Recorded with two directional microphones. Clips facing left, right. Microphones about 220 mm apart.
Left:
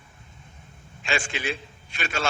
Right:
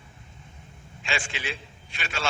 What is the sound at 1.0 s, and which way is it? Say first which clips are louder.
A man's voice: left 4 dB; 45° left (ahead or behind).